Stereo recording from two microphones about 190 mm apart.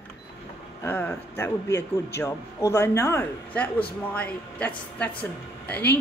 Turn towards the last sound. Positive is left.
turn(degrees=5)  # may be behind; listen again after turning